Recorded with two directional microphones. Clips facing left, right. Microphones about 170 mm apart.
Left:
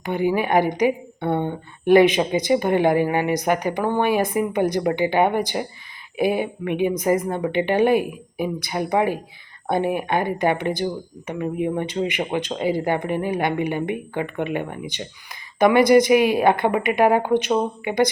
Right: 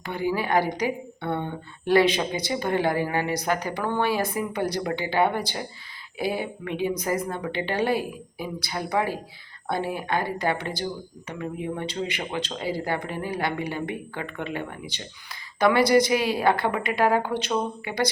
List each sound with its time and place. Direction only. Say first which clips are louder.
0.0 s a woman's voice: left 6 dB; 20° left (ahead or behind)